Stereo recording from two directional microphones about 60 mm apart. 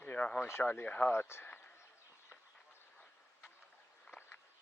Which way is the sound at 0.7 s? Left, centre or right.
Left.